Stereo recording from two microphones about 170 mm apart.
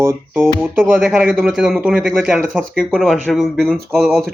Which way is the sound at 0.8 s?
Centre (ahead or behind).